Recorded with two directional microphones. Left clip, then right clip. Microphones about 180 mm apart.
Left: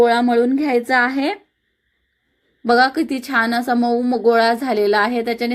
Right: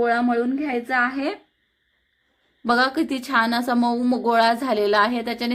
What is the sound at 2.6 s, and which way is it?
A woman's voice, 10° left (ahead or behind).